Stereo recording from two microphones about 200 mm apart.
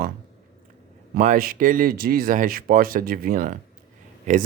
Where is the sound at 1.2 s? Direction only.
45° right (ahead or behind).